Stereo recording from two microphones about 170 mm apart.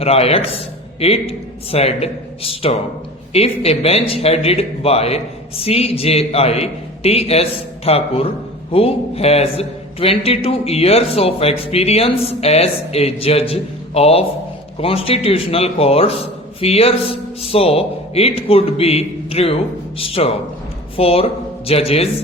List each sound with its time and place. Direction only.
0.0 s a man's voice: 35° left (ahead or behind)